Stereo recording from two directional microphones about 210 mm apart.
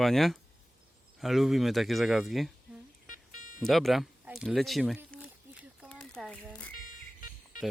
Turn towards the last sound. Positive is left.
turn(degrees=40)  # may be behind; listen again after turning